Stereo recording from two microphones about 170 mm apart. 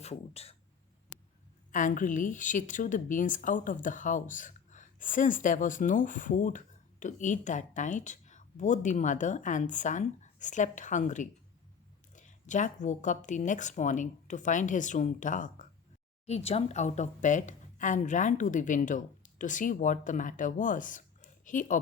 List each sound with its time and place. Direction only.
0.0 s speech: 40° left (ahead or behind)
1.7 s speech: 50° left (ahead or behind)
16.2 s speech: 40° left (ahead or behind)